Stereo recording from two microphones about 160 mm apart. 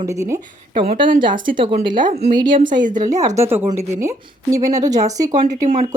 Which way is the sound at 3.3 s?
15° right (ahead or behind).